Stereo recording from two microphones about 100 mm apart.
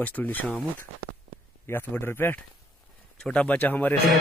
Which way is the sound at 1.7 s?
20° left (ahead or behind).